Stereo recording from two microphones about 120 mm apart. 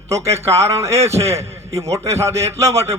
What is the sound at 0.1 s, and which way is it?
A man's voice, 25° right (ahead or behind).